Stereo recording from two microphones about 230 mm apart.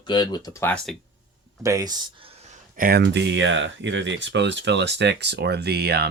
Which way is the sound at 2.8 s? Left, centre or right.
Right.